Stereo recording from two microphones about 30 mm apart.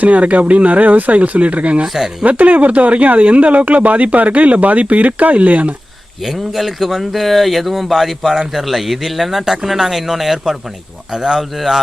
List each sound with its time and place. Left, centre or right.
0.0 s speech: right
2.2 s speech: right
6.5 s speech: centre
8.2 s speech: centre
8.6 s speech: centre